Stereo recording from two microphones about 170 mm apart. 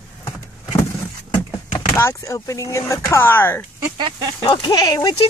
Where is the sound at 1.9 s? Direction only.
15° left (ahead or behind).